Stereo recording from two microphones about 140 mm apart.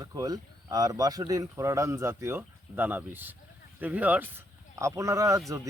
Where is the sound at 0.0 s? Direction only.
25° right (ahead or behind).